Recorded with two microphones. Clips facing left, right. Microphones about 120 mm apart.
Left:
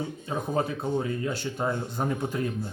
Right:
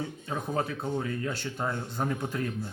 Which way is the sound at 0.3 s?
10° left (ahead or behind).